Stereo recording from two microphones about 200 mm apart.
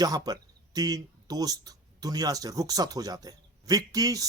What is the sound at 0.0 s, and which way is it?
Speech, 20° right (ahead or behind).